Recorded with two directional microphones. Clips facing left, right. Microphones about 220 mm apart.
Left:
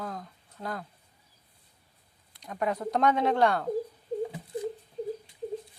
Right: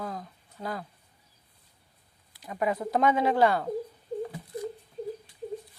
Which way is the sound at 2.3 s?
5° right (ahead or behind).